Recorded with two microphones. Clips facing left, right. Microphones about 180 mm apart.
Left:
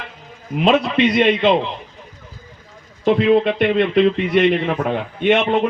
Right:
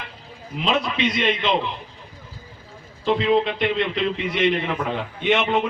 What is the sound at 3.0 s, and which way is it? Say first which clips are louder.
A man's voice: left 5 dB; 55° left (ahead or behind).